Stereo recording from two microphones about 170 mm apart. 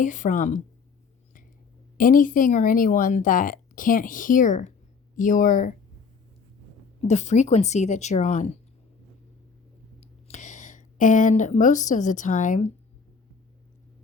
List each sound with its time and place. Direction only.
0.0 s speech: 50° left (ahead or behind)
2.0 s speech: 55° left (ahead or behind)
7.0 s speech: 40° left (ahead or behind)
10.0 s speech: 45° left (ahead or behind)